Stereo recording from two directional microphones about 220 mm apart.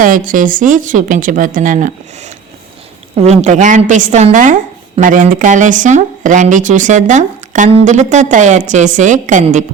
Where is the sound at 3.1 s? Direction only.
30° right (ahead or behind).